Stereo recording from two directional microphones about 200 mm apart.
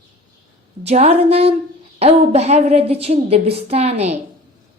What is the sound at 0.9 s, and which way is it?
A woman's voice, 30° right (ahead or behind).